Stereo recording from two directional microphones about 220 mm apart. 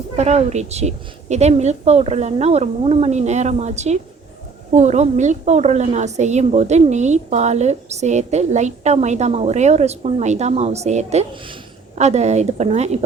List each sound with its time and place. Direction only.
0.2 s a woman's voice: 30° right (ahead or behind)